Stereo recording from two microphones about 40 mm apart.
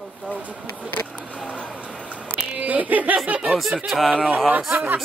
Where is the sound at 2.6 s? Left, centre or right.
Right.